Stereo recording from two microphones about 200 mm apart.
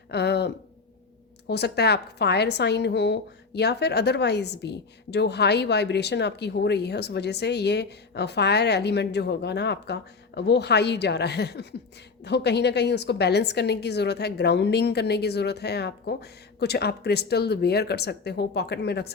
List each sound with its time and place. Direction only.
0.1 s a woman's voice: 55° left (ahead or behind)